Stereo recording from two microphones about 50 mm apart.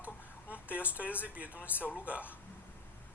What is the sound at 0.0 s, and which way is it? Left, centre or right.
Speech, right.